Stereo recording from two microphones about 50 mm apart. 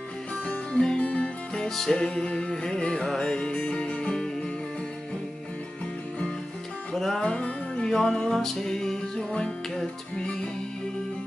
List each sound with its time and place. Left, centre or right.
0.7 s music: centre
1.5 s music: centre
7.0 s music: centre
7.2 s music: left